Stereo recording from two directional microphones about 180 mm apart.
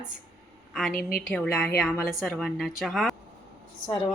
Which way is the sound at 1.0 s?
55° left (ahead or behind).